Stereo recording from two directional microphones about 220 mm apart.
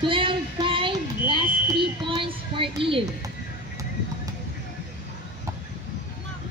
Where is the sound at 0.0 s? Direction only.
25° right (ahead or behind).